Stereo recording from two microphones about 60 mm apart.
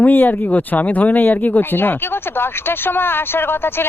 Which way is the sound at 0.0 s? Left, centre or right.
Left.